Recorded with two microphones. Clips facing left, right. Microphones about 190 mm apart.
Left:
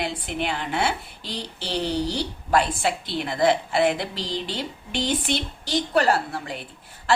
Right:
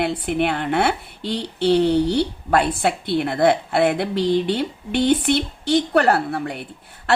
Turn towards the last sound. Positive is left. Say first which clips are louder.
# right 2 dB
turn(degrees=-65)  # may be behind; listen again after turning